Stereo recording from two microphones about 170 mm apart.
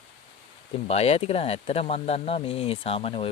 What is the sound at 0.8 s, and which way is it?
Speech, 35° left (ahead or behind).